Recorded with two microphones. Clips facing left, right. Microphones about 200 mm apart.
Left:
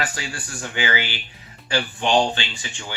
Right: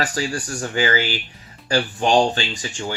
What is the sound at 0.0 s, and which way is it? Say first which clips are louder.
Speech: right 6 dB; 40° right (ahead or behind).